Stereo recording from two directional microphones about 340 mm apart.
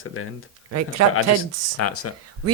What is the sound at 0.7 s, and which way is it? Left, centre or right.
Speech, right.